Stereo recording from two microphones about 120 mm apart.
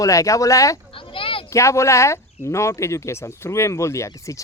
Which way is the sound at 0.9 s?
45° left (ahead or behind).